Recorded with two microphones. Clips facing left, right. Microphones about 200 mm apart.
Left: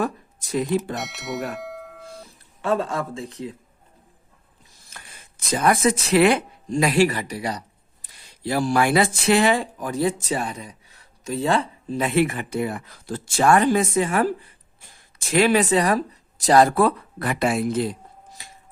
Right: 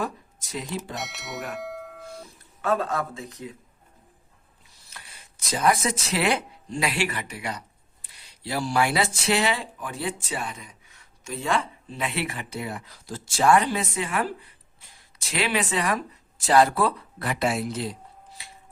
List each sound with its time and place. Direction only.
0.5 s speech: 55° left (ahead or behind)
0.9 s speech: centre (ahead or behind)
1.5 s a sound: centre (ahead or behind)
2.2 s speech: 30° left (ahead or behind)
4.9 s speech: 50° left (ahead or behind)
8.0 s speech: 50° left (ahead or behind)